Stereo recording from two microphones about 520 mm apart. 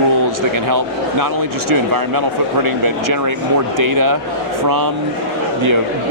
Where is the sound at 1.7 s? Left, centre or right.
Right.